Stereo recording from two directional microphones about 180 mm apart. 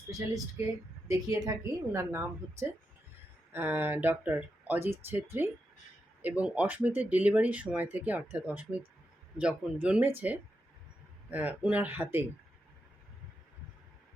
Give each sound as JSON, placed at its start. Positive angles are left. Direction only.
{"t": 0.1, "sound": "speech", "side_deg": -20}